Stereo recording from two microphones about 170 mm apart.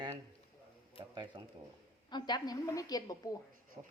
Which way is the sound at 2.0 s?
25° left (ahead or behind).